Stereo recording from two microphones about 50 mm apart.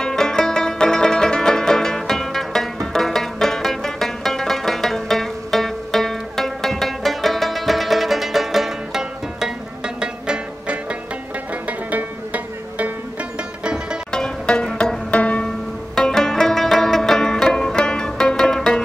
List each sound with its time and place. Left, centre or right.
0.0 s music: centre
11.6 s music: right
14.1 s music: centre
15.9 s music: centre